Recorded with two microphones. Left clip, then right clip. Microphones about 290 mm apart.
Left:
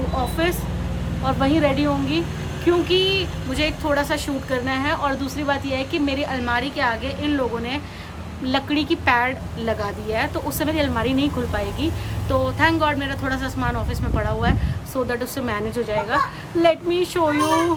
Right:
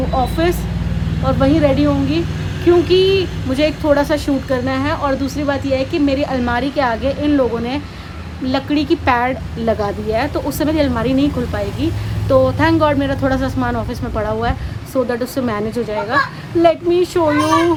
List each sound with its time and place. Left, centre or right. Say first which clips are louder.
0.2 s a woman's voice: right 5 dB; centre